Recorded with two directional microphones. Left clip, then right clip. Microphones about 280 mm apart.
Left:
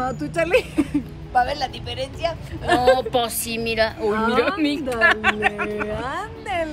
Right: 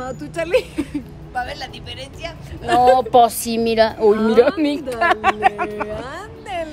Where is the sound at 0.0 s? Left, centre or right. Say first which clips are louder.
Left 2 dB; centre.